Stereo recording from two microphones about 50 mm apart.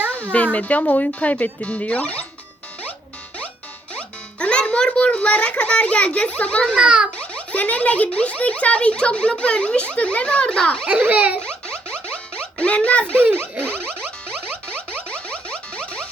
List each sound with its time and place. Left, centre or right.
0.3 s a child's voice: left
3.9 s music: left
6.7 s a child's voice: right
7.2 s a child's voice: left
10.8 s a child's voice: right
11.3 s a sound: centre
12.4 s speech: left
13.3 s a sound: right
14.9 s a sound: left